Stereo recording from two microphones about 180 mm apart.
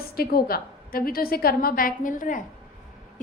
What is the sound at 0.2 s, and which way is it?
A woman's voice, 55° left (ahead or behind).